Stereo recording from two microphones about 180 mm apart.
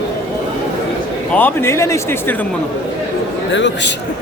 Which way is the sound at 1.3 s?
10° left (ahead or behind).